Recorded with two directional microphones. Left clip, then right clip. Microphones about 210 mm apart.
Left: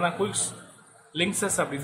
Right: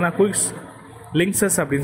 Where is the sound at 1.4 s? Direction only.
20° right (ahead or behind).